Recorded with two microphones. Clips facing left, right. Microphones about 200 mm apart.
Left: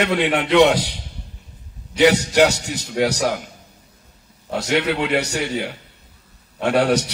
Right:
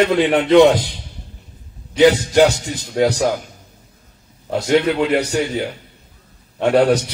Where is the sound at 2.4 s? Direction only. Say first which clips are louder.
Right 3 dB; 70° left (ahead or behind).